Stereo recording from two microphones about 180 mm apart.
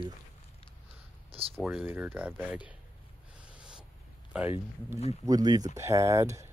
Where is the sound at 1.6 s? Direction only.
10° right (ahead or behind).